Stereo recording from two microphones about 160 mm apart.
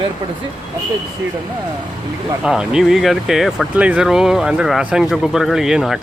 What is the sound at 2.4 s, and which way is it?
Speech, 5° right (ahead or behind).